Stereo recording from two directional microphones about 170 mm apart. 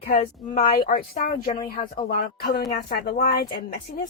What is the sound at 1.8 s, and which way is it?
Speech, 30° left (ahead or behind).